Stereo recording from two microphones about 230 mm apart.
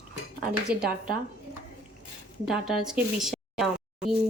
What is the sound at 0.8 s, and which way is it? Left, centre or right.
Speech, right.